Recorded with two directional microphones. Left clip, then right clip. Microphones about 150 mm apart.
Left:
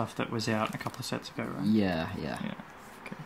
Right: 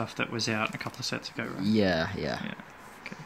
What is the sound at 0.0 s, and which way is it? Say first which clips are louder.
Speech: right 2 dB; 15° left (ahead or behind).